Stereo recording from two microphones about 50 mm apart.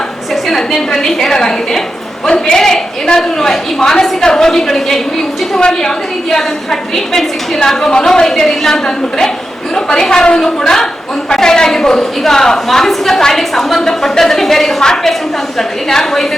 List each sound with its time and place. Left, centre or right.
0.4 s a woman's voice: centre